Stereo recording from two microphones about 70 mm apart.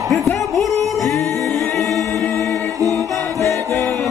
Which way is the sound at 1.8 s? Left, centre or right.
Centre.